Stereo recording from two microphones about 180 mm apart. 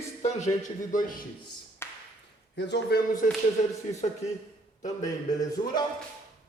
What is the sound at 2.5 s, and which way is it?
Speech, 70° left (ahead or behind).